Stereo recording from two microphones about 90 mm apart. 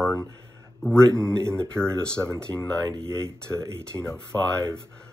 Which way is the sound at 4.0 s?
10° left (ahead or behind).